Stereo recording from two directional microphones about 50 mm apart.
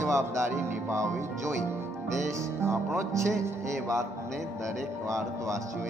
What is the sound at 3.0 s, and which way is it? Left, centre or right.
Speech, right.